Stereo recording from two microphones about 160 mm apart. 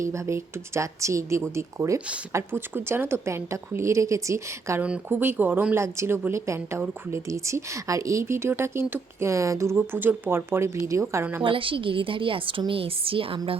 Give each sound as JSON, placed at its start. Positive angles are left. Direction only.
{"t": 0.0, "sound": "speech", "side_deg": -20}
{"t": 11.4, "sound": "a woman's voice", "side_deg": -30}